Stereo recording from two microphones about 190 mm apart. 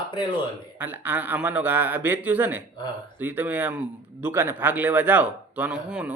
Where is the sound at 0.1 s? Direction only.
25° left (ahead or behind).